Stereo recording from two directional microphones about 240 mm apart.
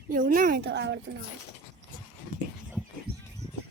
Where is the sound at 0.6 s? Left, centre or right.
Right.